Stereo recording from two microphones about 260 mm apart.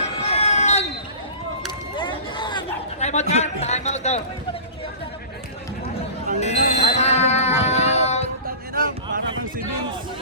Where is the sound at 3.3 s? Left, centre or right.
Left.